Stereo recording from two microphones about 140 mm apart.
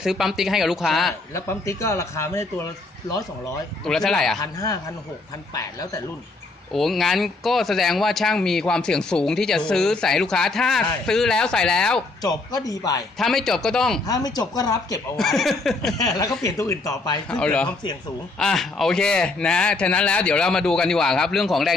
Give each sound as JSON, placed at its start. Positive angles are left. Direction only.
{"t": 0.0, "sound": "speech", "side_deg": -5}
{"t": 1.3, "sound": "a man's voice", "side_deg": 20}
{"t": 3.8, "sound": "speech", "side_deg": 5}
{"t": 4.4, "sound": "a man's voice", "side_deg": 25}
{"t": 6.7, "sound": "speech", "side_deg": 0}
{"t": 12.2, "sound": "a man's voice", "side_deg": 30}
{"t": 13.1, "sound": "speech", "side_deg": 0}
{"t": 14.1, "sound": "a man's voice", "side_deg": 25}
{"t": 15.2, "sound": "speech", "side_deg": 0}
{"t": 16.0, "sound": "a man's voice", "side_deg": 25}
{"t": 17.2, "sound": "speech", "side_deg": 10}